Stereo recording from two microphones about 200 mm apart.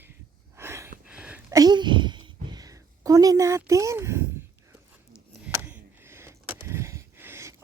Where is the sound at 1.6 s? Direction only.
20° right (ahead or behind).